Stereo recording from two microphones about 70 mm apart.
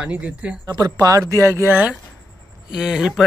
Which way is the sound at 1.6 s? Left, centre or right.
Right.